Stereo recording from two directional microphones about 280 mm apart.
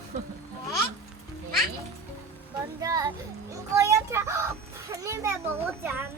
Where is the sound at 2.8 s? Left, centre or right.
Centre.